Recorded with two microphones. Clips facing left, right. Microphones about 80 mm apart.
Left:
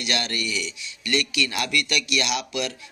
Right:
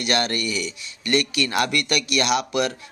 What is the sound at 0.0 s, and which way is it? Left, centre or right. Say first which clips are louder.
Speech: right 5 dB; right.